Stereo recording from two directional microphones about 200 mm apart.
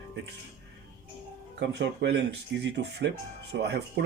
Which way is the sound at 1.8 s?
60° right (ahead or behind).